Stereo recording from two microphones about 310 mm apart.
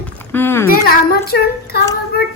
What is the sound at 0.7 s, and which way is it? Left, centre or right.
A child's voice, left.